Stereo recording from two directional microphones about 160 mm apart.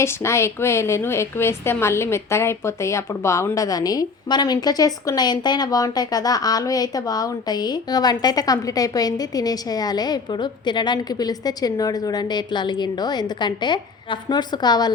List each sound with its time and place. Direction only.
0.0 s a woman's voice: 15° left (ahead or behind)